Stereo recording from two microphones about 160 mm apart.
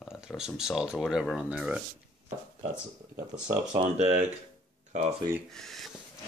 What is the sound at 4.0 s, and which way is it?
Speech, 40° right (ahead or behind).